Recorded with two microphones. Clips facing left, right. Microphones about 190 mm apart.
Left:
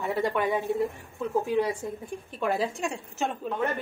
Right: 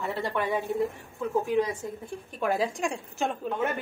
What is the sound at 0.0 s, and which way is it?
Speech, 20° left (ahead or behind).